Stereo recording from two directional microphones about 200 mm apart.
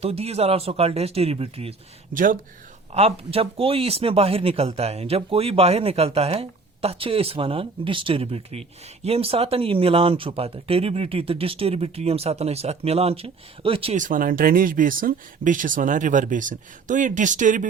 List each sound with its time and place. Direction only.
0.0 s speech: 30° right (ahead or behind)
2.1 s speech: 40° right (ahead or behind)
2.9 s speech: 30° right (ahead or behind)